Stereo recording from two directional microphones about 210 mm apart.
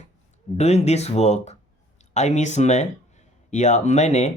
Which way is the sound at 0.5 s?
30° left (ahead or behind).